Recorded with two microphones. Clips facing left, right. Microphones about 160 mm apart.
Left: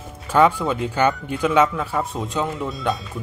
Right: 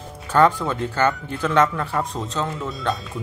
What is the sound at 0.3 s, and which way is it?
Speech, 10° left (ahead or behind).